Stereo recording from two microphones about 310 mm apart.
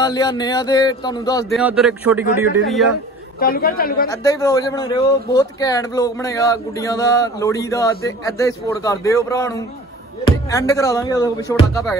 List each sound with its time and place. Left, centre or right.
0.0 s a man's voice: centre
1.5 s speech: centre
3.3 s a man's voice: left
4.1 s a man's voice: centre